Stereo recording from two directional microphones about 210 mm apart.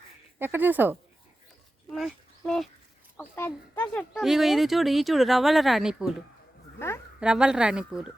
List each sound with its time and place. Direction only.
0.3 s speech: 10° right (ahead or behind)
1.9 s speech: centre (ahead or behind)
6.7 s a woman's voice: 10° left (ahead or behind)
7.2 s speech: 5° right (ahead or behind)